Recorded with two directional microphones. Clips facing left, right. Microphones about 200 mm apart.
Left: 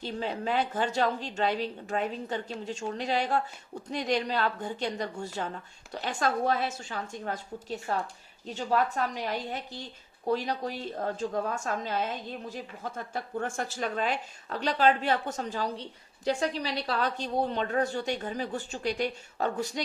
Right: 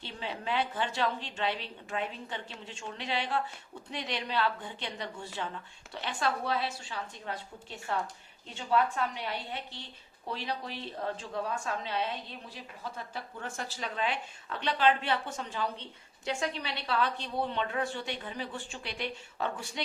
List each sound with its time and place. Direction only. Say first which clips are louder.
0.0 s a woman's voice: left 6 dB; 40° left (ahead or behind)